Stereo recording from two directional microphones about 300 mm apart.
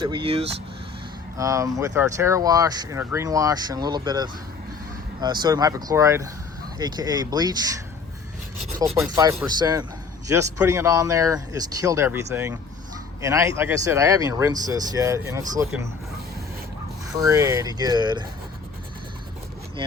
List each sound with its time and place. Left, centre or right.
0.0 s speech: centre
9.1 s speech: centre
17.1 s speech: centre